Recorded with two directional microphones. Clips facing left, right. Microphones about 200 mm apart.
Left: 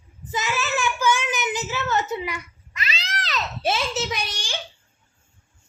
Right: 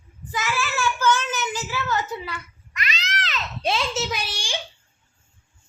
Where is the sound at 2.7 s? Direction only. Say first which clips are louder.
Right 1 dB; 30° left (ahead or behind).